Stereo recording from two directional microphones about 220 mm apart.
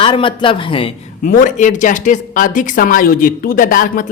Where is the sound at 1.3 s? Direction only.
35° left (ahead or behind).